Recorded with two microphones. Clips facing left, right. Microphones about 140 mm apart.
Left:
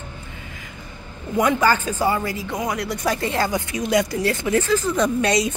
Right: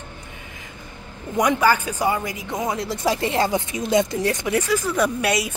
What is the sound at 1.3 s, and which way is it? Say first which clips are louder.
A woman's voice: even; 15° right (ahead or behind).